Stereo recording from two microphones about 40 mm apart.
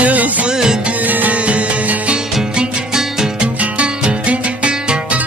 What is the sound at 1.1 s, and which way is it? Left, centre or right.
Music, right.